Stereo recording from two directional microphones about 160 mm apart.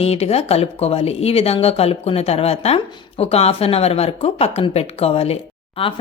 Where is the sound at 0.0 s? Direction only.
40° left (ahead or behind).